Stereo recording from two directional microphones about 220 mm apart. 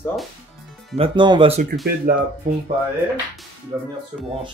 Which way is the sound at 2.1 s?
40° right (ahead or behind).